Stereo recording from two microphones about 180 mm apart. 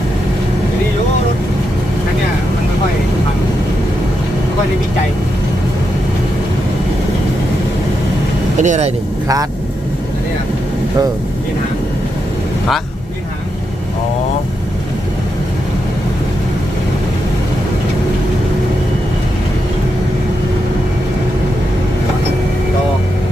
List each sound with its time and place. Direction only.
8.6 s speech: 45° right (ahead or behind)